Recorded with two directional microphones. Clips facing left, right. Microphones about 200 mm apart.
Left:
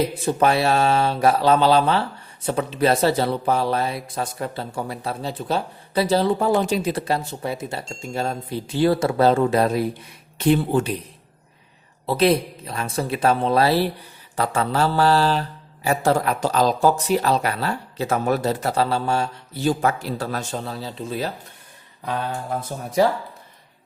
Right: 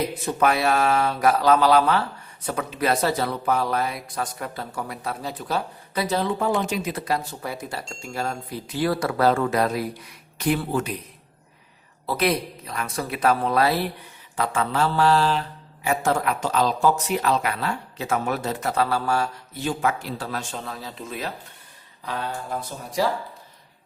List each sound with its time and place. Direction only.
0.2 s speech: 30° left (ahead or behind)
12.0 s speech: 30° left (ahead or behind)
14.3 s mantra: 35° left (ahead or behind)